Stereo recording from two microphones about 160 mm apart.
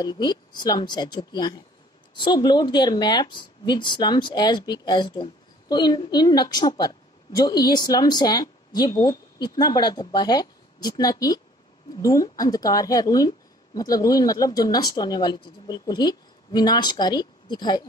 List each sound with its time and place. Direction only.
0.0 s a woman's voice: 25° left (ahead or behind)